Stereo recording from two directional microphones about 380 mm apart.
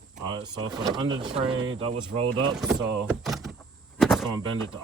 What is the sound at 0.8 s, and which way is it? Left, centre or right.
Speech, centre.